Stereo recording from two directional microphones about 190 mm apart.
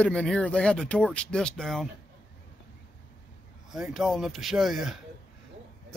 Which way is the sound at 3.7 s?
Centre (ahead or behind).